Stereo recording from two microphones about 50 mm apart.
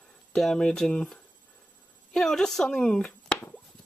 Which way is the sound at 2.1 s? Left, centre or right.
Centre.